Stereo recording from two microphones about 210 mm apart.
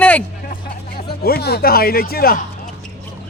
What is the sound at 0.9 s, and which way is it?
Speech, 45° left (ahead or behind).